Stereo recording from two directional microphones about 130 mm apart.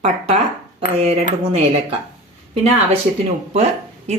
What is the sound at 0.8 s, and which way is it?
Speech, 50° right (ahead or behind).